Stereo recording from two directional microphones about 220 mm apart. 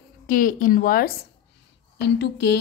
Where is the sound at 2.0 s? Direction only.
50° left (ahead or behind).